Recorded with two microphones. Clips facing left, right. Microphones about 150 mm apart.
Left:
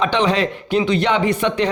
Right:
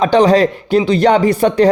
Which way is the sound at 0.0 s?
40° right (ahead or behind).